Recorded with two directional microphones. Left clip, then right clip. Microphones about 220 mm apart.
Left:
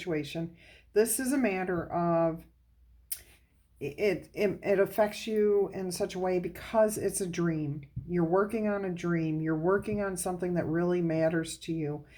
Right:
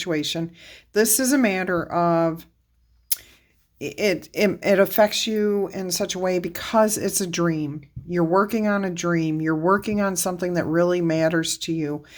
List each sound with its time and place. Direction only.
0.0 s speech: 40° right (ahead or behind)
3.8 s speech: 40° right (ahead or behind)